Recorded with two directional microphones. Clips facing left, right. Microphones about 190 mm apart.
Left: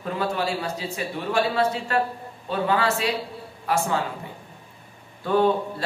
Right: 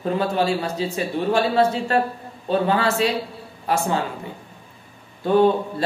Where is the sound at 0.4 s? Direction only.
25° right (ahead or behind).